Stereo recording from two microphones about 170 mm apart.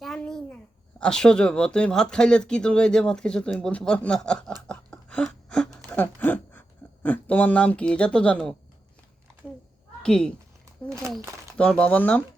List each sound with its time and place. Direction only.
0.0 s a child's voice: 5° left (ahead or behind)
4.7 s a sound: 5° left (ahead or behind)
10.0 s speech: 5° left (ahead or behind)
11.0 s speech: 15° right (ahead or behind)
11.5 s speech: 5° left (ahead or behind)